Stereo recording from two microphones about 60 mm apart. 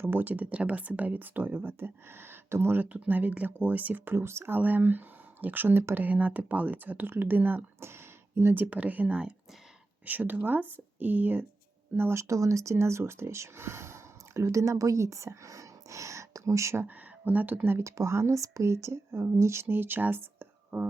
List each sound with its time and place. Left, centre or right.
0.0 s speech: right
4.5 s speech: right
7.8 s a sound: right
8.5 s speech: right
10.1 s speech: right
12.3 s speech: right
16.8 s speech: right
17.8 s speech: right
19.6 s speech: right